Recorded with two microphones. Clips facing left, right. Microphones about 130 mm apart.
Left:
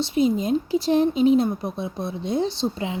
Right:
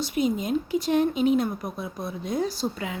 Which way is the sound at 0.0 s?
30° left (ahead or behind).